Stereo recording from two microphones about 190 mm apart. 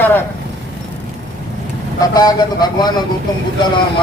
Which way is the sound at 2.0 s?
20° left (ahead or behind).